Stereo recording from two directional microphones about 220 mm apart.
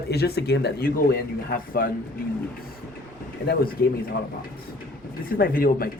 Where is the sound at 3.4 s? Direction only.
45° left (ahead or behind).